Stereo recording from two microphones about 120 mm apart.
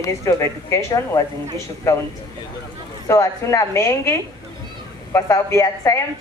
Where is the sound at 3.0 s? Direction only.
25° left (ahead or behind).